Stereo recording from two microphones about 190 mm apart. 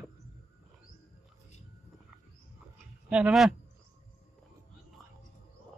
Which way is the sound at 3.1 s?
5° right (ahead or behind).